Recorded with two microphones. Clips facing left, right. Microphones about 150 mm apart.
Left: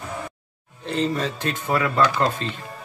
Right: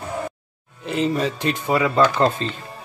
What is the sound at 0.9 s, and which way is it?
Speech, 15° right (ahead or behind).